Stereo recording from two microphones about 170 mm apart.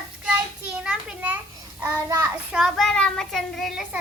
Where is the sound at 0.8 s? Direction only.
10° right (ahead or behind).